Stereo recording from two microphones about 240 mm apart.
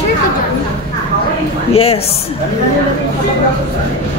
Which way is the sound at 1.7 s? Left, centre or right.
Left.